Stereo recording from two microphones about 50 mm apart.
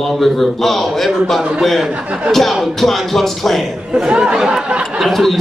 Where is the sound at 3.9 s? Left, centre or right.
Centre.